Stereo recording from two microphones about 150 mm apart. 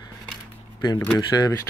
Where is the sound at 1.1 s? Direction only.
25° left (ahead or behind).